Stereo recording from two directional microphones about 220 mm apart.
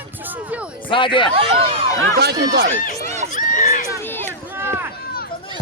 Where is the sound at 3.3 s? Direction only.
35° left (ahead or behind).